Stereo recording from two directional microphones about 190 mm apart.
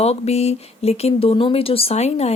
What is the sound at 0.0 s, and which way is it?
Speech, 35° left (ahead or behind).